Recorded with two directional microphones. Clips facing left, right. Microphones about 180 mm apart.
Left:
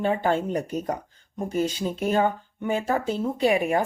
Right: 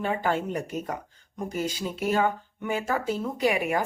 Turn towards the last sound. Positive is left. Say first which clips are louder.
# left 3 dB
turn(degrees=30)  # may be behind; listen again after turning